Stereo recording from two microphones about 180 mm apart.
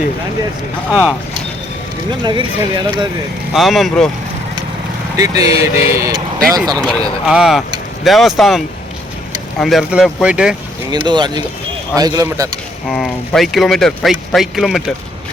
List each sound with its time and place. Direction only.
0.9 s speech: 5° right (ahead or behind)
2.0 s speech: 25° right (ahead or behind)
3.5 s speech: centre (ahead or behind)
5.1 s speech: 20° right (ahead or behind)
6.7 s speech: 5° left (ahead or behind)
11.0 s speech: 25° right (ahead or behind)
12.9 s speech: centre (ahead or behind)